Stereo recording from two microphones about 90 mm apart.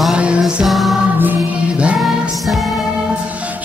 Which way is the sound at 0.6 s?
Centre (ahead or behind).